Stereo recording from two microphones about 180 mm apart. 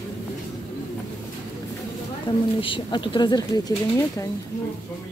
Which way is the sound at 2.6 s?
30° left (ahead or behind).